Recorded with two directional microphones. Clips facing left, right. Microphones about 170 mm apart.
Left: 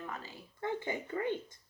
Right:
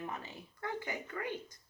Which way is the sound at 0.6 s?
25° left (ahead or behind).